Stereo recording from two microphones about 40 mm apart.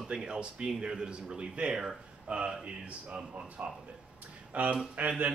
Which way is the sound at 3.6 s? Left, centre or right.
Right.